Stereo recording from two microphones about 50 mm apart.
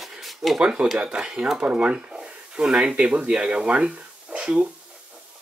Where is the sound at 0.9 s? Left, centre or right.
Centre.